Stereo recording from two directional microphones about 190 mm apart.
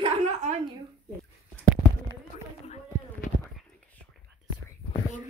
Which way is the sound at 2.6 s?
35° left (ahead or behind).